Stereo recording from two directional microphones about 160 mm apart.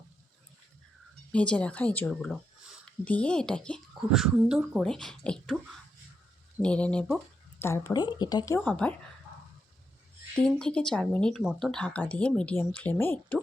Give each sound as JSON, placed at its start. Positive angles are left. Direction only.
{"t": 1.3, "sound": "speech", "side_deg": 5}
{"t": 6.6, "sound": "speech", "side_deg": 5}
{"t": 7.6, "sound": "a woman's voice", "side_deg": 20}
{"t": 8.6, "sound": "speech", "side_deg": 10}
{"t": 10.4, "sound": "speech", "side_deg": 5}